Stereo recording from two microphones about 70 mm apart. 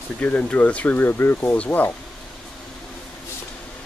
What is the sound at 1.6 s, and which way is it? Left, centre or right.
Speech, left.